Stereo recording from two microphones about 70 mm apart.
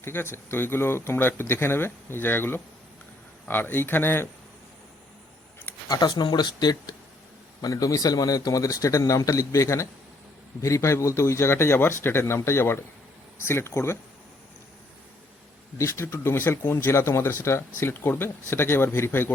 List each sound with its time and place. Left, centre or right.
0.0 s speech: left
5.9 s speech: left
7.6 s a man's voice: left
15.8 s speech: left